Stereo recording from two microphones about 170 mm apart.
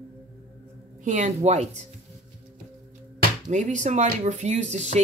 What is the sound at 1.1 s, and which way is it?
Speech, 45° right (ahead or behind).